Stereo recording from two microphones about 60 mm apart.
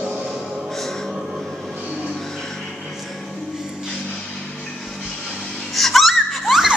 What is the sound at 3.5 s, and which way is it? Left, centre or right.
Music, centre.